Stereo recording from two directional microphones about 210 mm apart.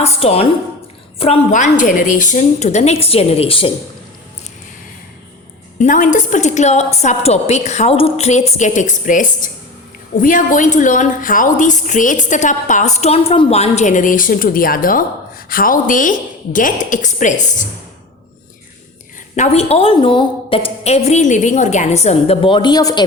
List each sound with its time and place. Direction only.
0.0 s a woman's voice: 30° left (ahead or behind)
5.8 s a woman's voice: 40° left (ahead or behind)
19.4 s a woman's voice: 30° left (ahead or behind)